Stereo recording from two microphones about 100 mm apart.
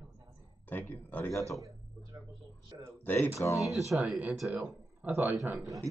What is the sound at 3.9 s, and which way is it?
Speech, 15° right (ahead or behind).